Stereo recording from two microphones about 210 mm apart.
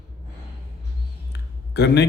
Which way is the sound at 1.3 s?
55° left (ahead or behind).